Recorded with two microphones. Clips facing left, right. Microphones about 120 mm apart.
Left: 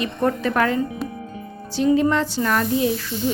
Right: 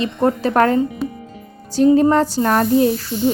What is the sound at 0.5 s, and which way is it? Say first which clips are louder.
Speech: right 5 dB; 40° right (ahead or behind).